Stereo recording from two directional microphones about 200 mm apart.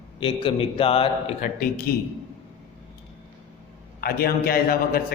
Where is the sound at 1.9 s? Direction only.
50° left (ahead or behind).